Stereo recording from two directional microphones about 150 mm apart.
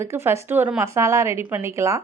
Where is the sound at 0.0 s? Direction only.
15° right (ahead or behind).